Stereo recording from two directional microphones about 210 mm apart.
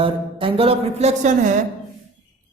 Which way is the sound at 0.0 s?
25° right (ahead or behind).